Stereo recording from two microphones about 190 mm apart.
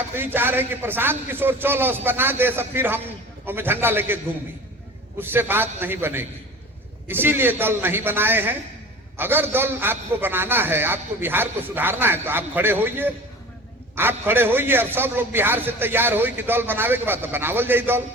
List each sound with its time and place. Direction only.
0.2 s a man's voice: 10° right (ahead or behind)
5.2 s a man's voice: 10° right (ahead or behind)